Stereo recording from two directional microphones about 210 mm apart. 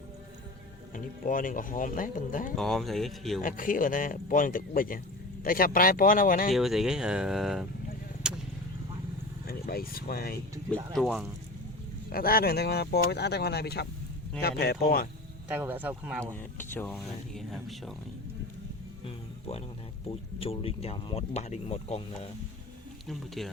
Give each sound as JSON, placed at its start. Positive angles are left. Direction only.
{"t": 0.9, "sound": "speech", "side_deg": 40}
{"t": 2.6, "sound": "speech", "side_deg": 0}
{"t": 3.4, "sound": "speech", "side_deg": 40}
{"t": 6.5, "sound": "speech", "side_deg": 0}
{"t": 8.2, "sound": "a sound", "side_deg": -5}
{"t": 9.5, "sound": "speech", "side_deg": 45}
{"t": 10.9, "sound": "speech", "side_deg": 0}
{"t": 12.1, "sound": "speech", "side_deg": 45}
{"t": 15.4, "sound": "speech", "side_deg": -10}
{"t": 16.3, "sound": "speech", "side_deg": 10}
{"t": 19.0, "sound": "music", "side_deg": 30}
{"t": 20.1, "sound": "speech", "side_deg": 25}
{"t": 23.0, "sound": "speech", "side_deg": 0}